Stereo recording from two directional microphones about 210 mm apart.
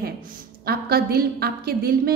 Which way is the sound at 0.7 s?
45° right (ahead or behind).